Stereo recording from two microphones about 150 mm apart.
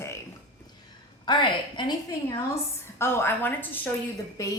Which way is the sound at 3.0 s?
15° left (ahead or behind).